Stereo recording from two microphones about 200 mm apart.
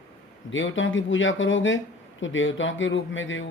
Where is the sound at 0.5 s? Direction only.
75° left (ahead or behind).